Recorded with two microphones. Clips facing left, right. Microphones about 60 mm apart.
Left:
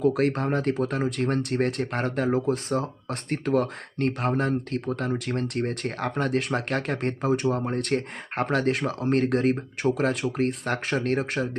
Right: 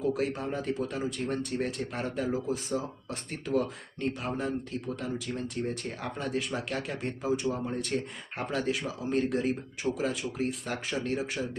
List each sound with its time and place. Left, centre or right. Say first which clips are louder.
0.0 s speech: left 7 dB; left